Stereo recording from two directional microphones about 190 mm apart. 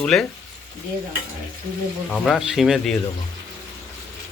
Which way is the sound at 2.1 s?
Centre (ahead or behind).